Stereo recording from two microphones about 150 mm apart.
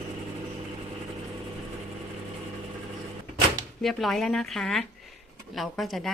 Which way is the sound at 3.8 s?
Centre (ahead or behind).